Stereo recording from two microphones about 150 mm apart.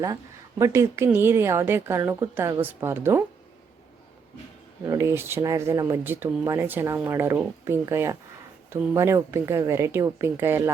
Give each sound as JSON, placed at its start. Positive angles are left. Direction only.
{"t": 0.6, "sound": "speech", "side_deg": -20}
{"t": 4.8, "sound": "speech", "side_deg": -20}